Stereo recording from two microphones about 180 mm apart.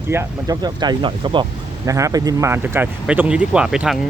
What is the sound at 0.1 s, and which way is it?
Speech, 15° right (ahead or behind).